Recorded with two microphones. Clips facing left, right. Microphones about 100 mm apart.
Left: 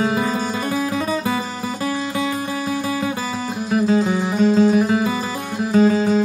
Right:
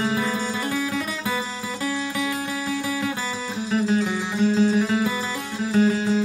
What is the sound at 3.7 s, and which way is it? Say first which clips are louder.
Music: left 5 dB; 55° left (ahead or behind).